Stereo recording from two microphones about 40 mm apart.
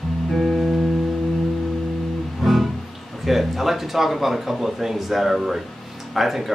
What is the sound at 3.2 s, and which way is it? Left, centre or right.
Speech, centre.